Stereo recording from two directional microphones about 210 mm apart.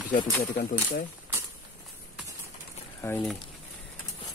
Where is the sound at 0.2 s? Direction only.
15° left (ahead or behind).